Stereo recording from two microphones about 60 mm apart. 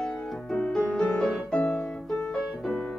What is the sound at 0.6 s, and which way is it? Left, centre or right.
Music, centre.